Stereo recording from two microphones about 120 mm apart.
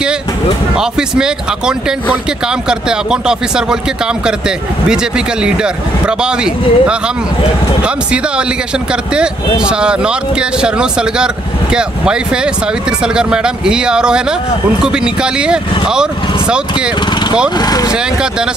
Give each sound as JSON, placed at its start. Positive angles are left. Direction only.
{"t": 0.7, "sound": "speech", "side_deg": -5}
{"t": 4.8, "sound": "speech", "side_deg": -5}
{"t": 17.6, "sound": "speech", "side_deg": 30}